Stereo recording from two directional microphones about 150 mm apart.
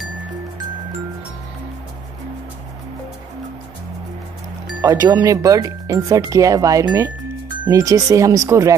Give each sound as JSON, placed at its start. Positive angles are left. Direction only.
{"t": 4.8, "sound": "speech", "side_deg": -25}